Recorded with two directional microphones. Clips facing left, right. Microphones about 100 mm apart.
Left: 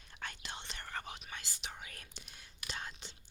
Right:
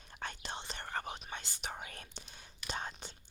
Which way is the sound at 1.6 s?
45° right (ahead or behind).